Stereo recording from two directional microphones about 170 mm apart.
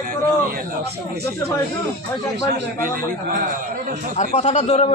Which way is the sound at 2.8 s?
55° right (ahead or behind).